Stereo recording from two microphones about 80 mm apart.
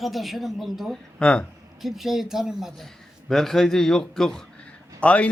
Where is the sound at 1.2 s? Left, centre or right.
Centre.